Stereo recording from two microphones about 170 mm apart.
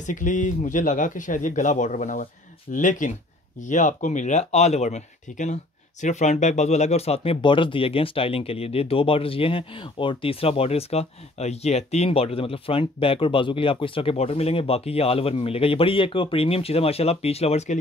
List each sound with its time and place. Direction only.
0.0 s speech: 50° left (ahead or behind)